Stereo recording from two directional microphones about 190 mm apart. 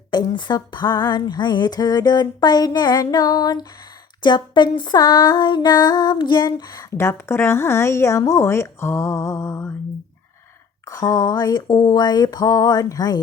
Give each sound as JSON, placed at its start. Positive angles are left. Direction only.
{"t": 0.1, "sound": "female singing", "side_deg": 25}
{"t": 8.2, "sound": "speech", "side_deg": 15}
{"t": 10.8, "sound": "female singing", "side_deg": 20}